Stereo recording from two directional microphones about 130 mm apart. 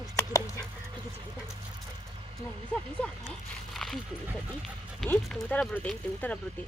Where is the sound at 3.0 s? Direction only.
5° left (ahead or behind).